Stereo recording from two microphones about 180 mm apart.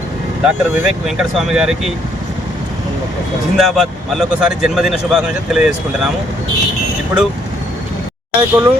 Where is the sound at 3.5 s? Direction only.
Centre (ahead or behind).